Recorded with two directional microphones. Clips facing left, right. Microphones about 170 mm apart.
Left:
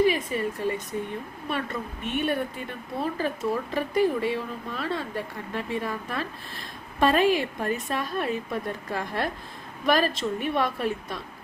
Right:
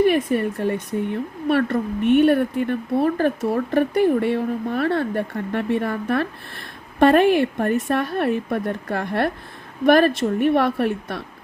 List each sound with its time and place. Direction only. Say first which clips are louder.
0.0 s a woman's voice: right 5 dB; 60° right (ahead or behind)